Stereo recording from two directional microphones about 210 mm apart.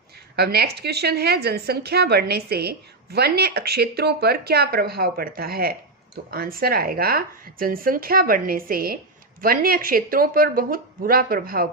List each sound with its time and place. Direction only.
0.3 s a woman's voice: 50° right (ahead or behind)